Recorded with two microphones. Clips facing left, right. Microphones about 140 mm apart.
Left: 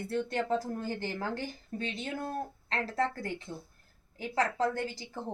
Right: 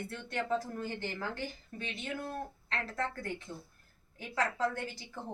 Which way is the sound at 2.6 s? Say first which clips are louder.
Left 6 dB; 35° left (ahead or behind).